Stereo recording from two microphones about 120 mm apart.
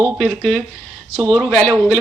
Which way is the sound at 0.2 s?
5° right (ahead or behind).